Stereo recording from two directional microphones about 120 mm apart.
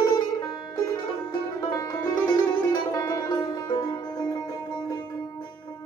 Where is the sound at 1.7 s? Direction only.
30° left (ahead or behind).